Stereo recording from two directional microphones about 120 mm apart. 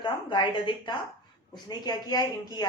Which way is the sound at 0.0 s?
40° left (ahead or behind).